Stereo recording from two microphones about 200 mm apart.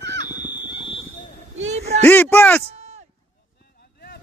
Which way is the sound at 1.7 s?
35° right (ahead or behind).